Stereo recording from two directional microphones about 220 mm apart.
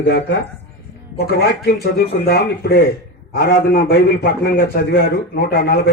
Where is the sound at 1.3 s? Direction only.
45° left (ahead or behind).